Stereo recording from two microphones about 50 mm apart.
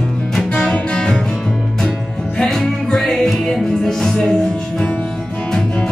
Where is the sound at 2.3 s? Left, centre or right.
Centre.